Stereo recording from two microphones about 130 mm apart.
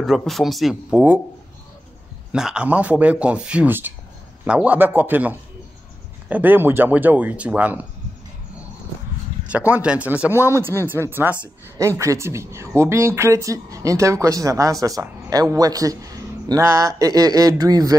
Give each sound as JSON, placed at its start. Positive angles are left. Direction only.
{"t": 0.0, "sound": "speech", "side_deg": 0}
{"t": 2.3, "sound": "speech", "side_deg": -5}
{"t": 9.5, "sound": "speech", "side_deg": -10}